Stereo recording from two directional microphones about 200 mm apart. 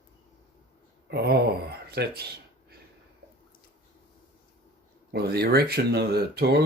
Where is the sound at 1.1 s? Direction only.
55° right (ahead or behind).